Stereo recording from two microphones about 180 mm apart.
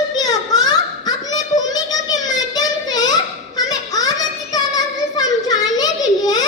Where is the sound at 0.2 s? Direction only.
20° left (ahead or behind).